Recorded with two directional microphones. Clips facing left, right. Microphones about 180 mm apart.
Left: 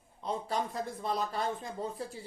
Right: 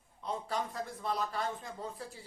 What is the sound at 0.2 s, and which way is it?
Speech, 25° left (ahead or behind).